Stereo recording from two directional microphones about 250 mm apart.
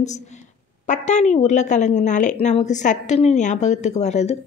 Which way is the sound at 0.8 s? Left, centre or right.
Left.